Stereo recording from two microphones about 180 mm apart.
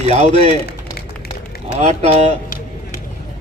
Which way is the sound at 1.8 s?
40° right (ahead or behind).